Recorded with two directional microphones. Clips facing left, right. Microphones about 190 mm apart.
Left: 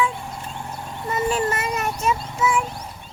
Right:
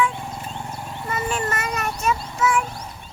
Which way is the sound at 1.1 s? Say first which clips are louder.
Left 4 dB; 20° left (ahead or behind).